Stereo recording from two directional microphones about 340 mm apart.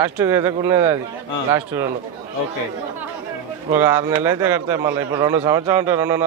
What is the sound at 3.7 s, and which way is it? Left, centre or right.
A man's voice, centre.